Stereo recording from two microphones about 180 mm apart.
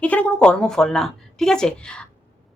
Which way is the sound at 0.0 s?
10° left (ahead or behind).